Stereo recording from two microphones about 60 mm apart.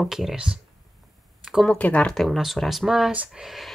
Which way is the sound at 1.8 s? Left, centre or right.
Left.